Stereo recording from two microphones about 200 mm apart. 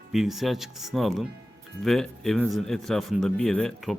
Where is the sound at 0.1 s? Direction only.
Centre (ahead or behind).